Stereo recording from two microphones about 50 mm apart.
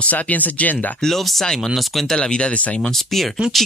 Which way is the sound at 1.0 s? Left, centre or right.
Centre.